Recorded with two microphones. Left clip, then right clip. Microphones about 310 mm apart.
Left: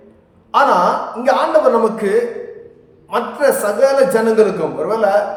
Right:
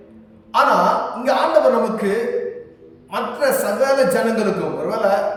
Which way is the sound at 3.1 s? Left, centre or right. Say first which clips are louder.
Left 4 dB; centre.